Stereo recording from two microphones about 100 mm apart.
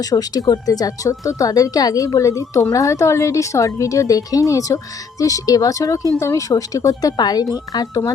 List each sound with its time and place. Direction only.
0.0 s speech: 40° left (ahead or behind)